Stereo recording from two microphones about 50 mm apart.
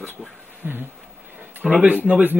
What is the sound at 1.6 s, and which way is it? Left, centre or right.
Speech, right.